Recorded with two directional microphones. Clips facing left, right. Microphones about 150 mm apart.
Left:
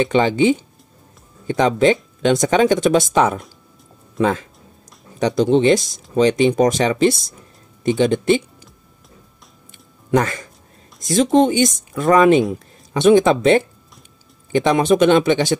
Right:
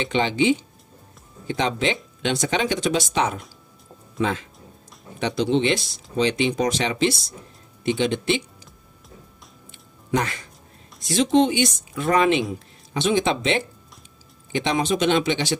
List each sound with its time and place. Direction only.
0.0 s speech: 45° left (ahead or behind)
9.7 s music: 45° left (ahead or behind)
11.0 s speech: 45° left (ahead or behind)